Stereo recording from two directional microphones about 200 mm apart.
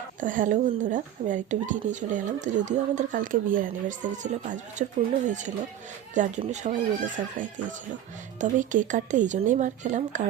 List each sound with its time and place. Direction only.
0.2 s speech: 40° right (ahead or behind)